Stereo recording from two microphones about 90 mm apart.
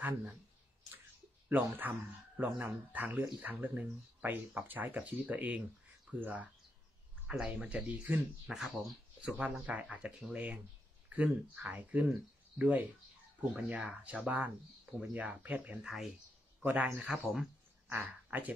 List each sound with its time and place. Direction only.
0.0 s speech: 15° right (ahead or behind)
1.5 s speech: 20° right (ahead or behind)
2.3 s speech: 10° right (ahead or behind)
8.5 s speech: 5° right (ahead or behind)
17.3 s a sound: 5° right (ahead or behind)
17.9 s speech: 20° right (ahead or behind)